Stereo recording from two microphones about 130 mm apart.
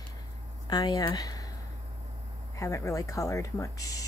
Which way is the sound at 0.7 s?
30° left (ahead or behind).